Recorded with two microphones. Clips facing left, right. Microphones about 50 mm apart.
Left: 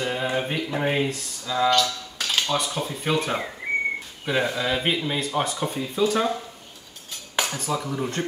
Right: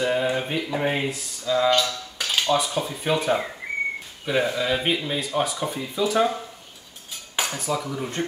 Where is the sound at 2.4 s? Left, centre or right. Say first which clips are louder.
Right 3 dB; centre.